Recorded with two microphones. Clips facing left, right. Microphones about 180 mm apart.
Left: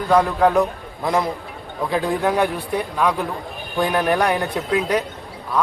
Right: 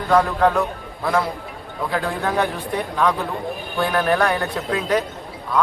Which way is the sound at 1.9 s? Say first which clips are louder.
Left 4 dB; 15° left (ahead or behind).